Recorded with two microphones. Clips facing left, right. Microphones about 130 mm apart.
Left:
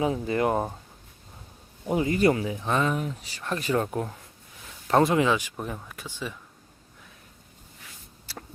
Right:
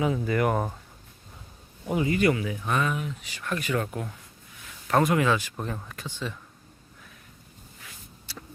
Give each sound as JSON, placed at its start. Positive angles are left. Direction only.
{"t": 0.0, "sound": "speech", "side_deg": 30}
{"t": 1.9, "sound": "speech", "side_deg": 35}
{"t": 4.9, "sound": "speech", "side_deg": 25}